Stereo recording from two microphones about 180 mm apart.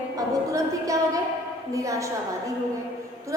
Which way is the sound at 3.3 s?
15° right (ahead or behind).